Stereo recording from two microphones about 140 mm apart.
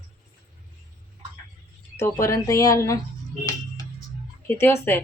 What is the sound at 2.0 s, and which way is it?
Speech, 20° left (ahead or behind).